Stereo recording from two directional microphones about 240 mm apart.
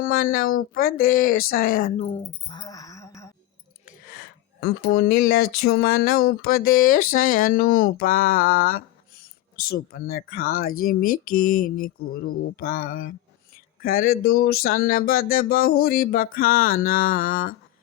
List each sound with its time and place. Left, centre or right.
0.0 s speech: left; by 3.3 s centre
4.6 s speech: left